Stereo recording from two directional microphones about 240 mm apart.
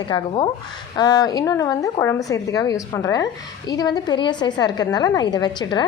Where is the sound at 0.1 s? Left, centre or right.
Centre.